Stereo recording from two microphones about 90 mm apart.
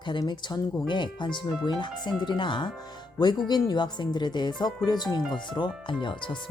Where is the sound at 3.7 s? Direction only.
55° left (ahead or behind).